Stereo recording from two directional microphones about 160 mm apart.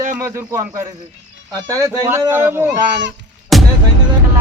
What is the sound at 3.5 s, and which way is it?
Music, centre (ahead or behind).